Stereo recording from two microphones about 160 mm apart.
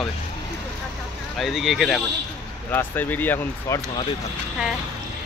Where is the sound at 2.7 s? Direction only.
10° left (ahead or behind).